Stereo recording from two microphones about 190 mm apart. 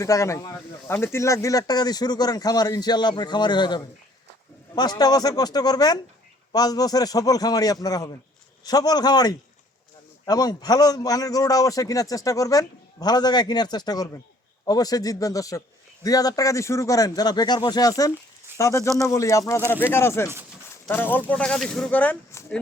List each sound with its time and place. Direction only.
0.0 s a man's voice: 15° left (ahead or behind)